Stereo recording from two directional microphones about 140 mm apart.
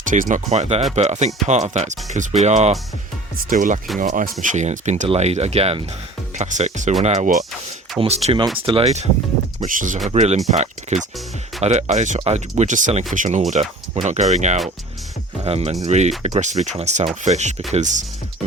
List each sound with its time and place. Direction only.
0.1 s speech: 65° right (ahead or behind)
3.5 s speech: 70° right (ahead or behind)
5.0 s speech: 45° right (ahead or behind)
9.6 s speech: 70° right (ahead or behind)
10.1 s speech: 50° right (ahead or behind)